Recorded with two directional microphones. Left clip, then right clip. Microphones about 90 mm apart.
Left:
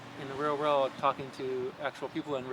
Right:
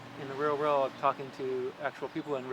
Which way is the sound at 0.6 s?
35° left (ahead or behind).